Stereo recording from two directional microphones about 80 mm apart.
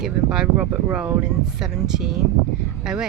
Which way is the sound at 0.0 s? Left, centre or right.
Centre.